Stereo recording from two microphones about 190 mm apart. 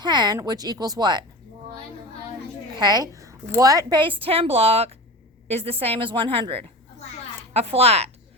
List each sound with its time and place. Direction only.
0.0 s speech: 20° right (ahead or behind)
2.7 s a woman's voice: 20° right (ahead or behind)